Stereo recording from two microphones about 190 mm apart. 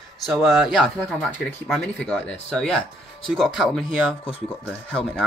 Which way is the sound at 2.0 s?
5° left (ahead or behind).